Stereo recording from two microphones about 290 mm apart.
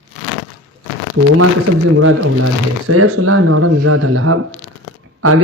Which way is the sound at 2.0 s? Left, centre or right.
Right.